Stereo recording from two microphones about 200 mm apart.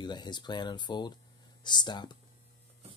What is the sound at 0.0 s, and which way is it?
Speech, 20° left (ahead or behind).